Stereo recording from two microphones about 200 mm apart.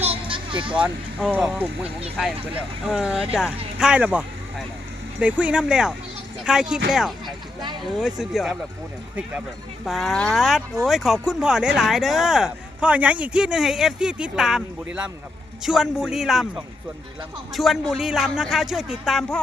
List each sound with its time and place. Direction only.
0.0 s a sound: 25° right (ahead or behind)
0.7 s speech: 5° right (ahead or behind)
2.8 s speech: 5° right (ahead or behind)
9.8 s speech: centre (ahead or behind)
15.6 s speech: centre (ahead or behind)
17.5 s speech: centre (ahead or behind)